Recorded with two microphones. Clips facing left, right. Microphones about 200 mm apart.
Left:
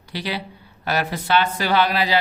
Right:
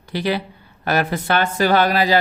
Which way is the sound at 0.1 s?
50° right (ahead or behind).